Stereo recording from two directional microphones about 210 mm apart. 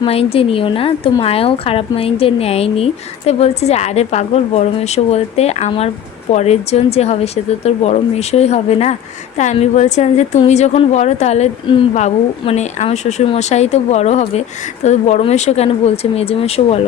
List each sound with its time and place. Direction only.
0.0 s a woman's voice: 30° left (ahead or behind)